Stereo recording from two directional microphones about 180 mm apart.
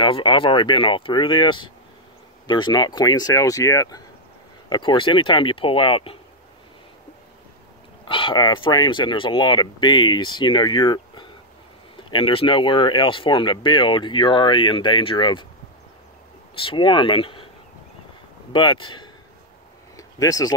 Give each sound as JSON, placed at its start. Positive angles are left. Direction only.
{"t": 0.0, "sound": "speech", "side_deg": 25}
{"t": 8.1, "sound": "speech", "side_deg": 25}
{"t": 16.5, "sound": "speech", "side_deg": 30}
{"t": 18.5, "sound": "speech", "side_deg": 25}